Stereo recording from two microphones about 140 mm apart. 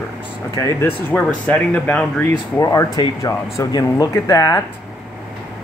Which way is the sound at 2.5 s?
25° left (ahead or behind).